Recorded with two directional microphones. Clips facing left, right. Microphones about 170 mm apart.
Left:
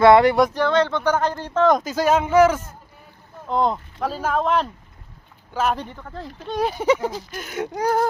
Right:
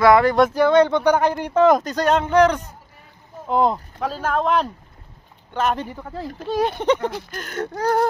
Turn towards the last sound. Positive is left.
turn(degrees=10)  # may be behind; listen again after turning